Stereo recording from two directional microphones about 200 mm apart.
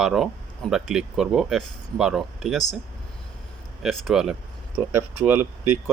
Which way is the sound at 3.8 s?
Centre (ahead or behind).